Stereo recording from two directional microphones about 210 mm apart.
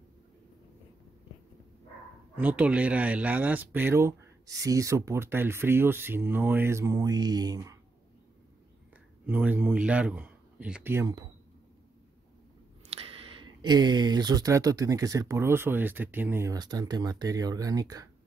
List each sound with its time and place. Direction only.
2.3 s speech: 5° right (ahead or behind)
9.2 s speech: 10° right (ahead or behind)
12.8 s speech: 25° right (ahead or behind)